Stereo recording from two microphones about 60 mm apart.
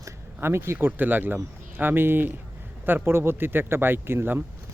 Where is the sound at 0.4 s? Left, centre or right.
Right.